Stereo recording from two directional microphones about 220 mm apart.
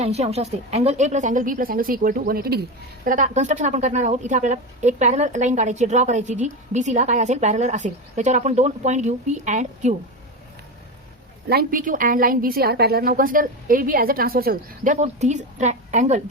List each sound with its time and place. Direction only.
0.0 s a woman's voice: 30° right (ahead or behind)
11.4 s a woman's voice: 40° right (ahead or behind)